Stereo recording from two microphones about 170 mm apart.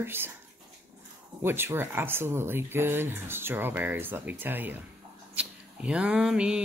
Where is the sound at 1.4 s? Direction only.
15° right (ahead or behind).